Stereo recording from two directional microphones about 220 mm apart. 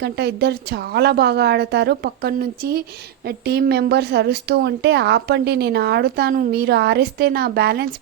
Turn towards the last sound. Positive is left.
turn(degrees=-45)  # may be behind; listen again after turning